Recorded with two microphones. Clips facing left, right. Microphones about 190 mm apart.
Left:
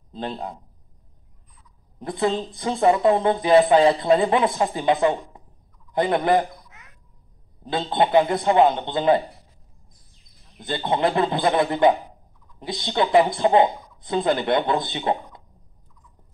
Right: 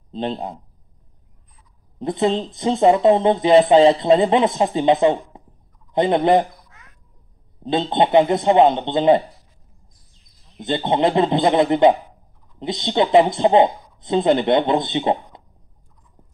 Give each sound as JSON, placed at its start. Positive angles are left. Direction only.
{"t": 0.1, "sound": "speech", "side_deg": -20}
{"t": 2.0, "sound": "speech", "side_deg": -20}
{"t": 6.7, "sound": "babbling", "side_deg": 15}
{"t": 7.6, "sound": "speech", "side_deg": -20}
{"t": 10.6, "sound": "speech", "side_deg": -15}